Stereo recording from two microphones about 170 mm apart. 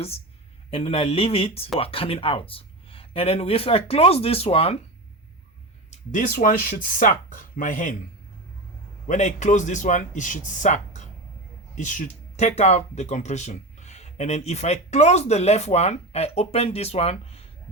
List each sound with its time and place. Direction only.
0.7 s speech: 35° left (ahead or behind)
5.9 s speech: 50° left (ahead or behind)
9.0 s speech: 45° left (ahead or behind)